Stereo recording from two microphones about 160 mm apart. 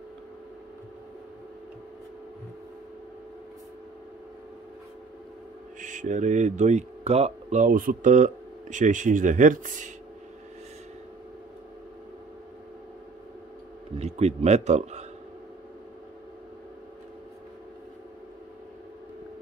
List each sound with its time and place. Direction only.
5.8 s speech: 50° right (ahead or behind)
13.9 s speech: 40° right (ahead or behind)